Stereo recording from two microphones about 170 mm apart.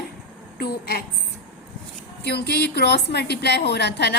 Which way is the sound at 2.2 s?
75° left (ahead or behind).